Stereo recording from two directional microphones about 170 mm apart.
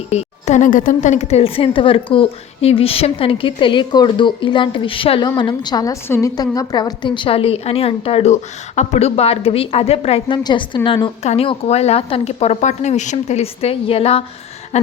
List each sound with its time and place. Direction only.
0.1 s a woman's voice: 40° left (ahead or behind)